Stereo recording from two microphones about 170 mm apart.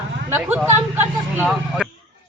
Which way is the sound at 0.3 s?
10° right (ahead or behind).